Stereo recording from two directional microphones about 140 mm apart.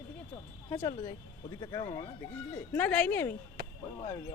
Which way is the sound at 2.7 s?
10° left (ahead or behind).